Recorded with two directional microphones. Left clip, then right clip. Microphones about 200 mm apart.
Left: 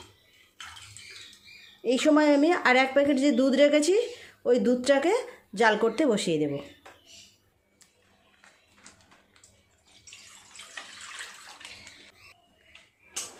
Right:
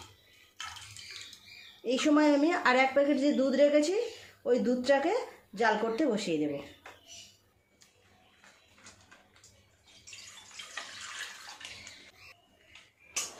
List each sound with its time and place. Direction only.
1.8 s speech: 35° left (ahead or behind)